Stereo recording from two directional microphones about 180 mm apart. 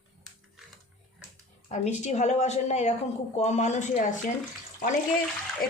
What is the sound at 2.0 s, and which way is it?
A woman's voice, 40° left (ahead or behind).